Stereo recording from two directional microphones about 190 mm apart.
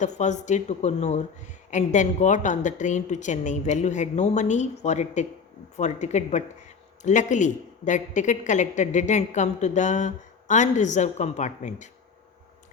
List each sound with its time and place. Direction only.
0.0 s a woman's voice: 40° left (ahead or behind)